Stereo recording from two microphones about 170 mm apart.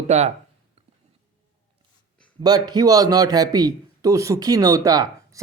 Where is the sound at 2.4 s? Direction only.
25° right (ahead or behind).